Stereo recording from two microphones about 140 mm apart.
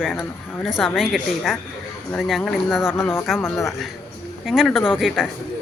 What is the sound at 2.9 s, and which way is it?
Speech, 15° left (ahead or behind).